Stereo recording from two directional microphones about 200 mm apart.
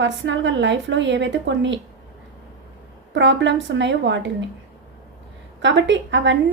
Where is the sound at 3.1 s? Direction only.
65° right (ahead or behind).